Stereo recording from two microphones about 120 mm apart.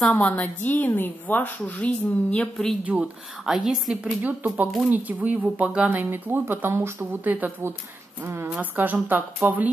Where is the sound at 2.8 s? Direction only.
10° right (ahead or behind).